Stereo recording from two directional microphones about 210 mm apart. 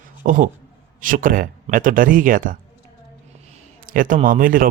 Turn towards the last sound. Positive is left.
turn(degrees=-40)  # may be behind; listen again after turning